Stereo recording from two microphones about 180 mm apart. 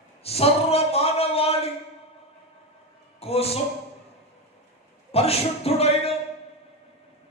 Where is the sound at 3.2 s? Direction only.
35° left (ahead or behind).